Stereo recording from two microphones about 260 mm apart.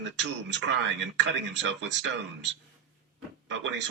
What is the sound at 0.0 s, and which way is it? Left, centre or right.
A man's voice, right.